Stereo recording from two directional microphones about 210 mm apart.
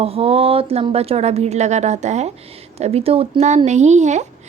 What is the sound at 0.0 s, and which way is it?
A woman's voice, 30° right (ahead or behind).